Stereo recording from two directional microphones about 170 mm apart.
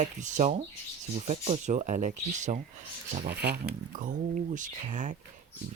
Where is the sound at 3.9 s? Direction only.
50° right (ahead or behind).